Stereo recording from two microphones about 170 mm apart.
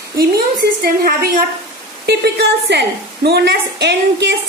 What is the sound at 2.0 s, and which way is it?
A woman's voice, 75° right (ahead or behind).